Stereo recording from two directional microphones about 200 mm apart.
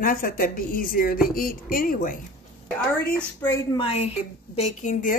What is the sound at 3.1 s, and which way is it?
Speech, 15° left (ahead or behind).